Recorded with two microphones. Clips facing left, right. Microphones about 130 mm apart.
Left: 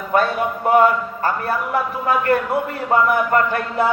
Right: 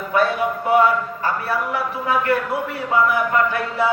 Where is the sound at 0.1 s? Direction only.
50° left (ahead or behind).